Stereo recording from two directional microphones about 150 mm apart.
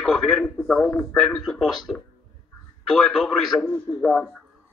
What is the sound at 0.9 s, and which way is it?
Speech, 20° left (ahead or behind).